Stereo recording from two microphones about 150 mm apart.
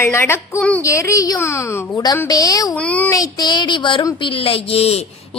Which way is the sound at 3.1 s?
25° left (ahead or behind).